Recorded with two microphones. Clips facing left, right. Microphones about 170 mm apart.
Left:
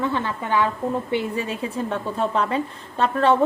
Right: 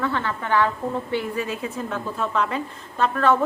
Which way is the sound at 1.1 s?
30° left (ahead or behind).